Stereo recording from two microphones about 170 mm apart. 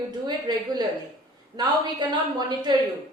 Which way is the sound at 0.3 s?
25° right (ahead or behind).